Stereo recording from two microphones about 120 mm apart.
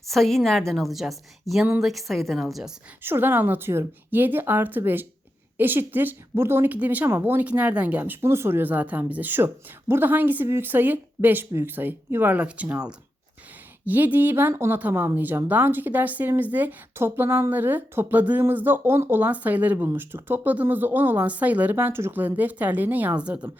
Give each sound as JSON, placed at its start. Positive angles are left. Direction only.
{"t": 0.0, "sound": "a woman's voice", "side_deg": 0}
{"t": 3.0, "sound": "a woman's voice", "side_deg": -20}